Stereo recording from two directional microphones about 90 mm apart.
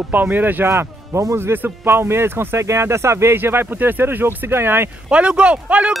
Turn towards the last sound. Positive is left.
turn(degrees=-10)  # may be behind; listen again after turning